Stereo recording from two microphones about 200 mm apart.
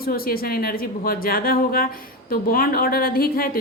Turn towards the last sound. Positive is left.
turn(degrees=45)  # may be behind; listen again after turning